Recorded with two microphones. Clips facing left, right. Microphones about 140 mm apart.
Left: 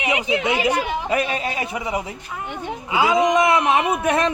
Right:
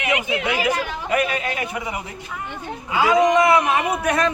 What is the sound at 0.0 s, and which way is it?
A man's voice, 30° left (ahead or behind).